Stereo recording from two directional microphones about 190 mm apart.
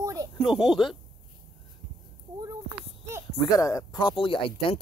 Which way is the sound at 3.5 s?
20° left (ahead or behind).